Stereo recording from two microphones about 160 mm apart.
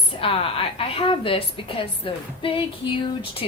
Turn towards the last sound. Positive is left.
turn(degrees=35)  # may be behind; listen again after turning